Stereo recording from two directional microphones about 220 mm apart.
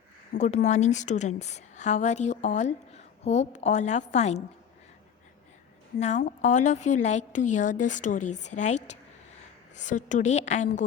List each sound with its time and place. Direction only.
0.3 s a woman's voice: 30° left (ahead or behind)
6.0 s a woman's voice: 30° left (ahead or behind)